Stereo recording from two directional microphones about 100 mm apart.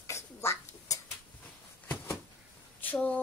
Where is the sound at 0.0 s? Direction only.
30° left (ahead or behind).